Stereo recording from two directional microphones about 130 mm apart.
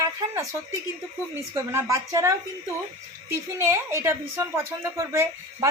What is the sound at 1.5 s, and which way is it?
Speech, 25° right (ahead or behind).